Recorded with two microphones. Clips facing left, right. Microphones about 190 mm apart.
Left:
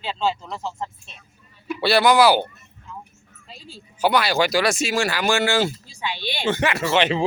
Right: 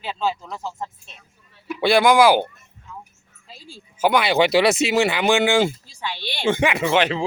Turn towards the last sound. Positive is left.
turn(degrees=-15)  # may be behind; listen again after turning